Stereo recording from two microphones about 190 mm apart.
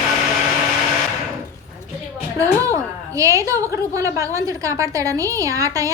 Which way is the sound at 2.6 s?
15° right (ahead or behind).